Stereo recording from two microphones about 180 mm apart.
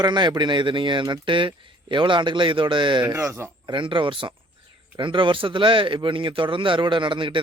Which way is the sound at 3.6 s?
25° right (ahead or behind).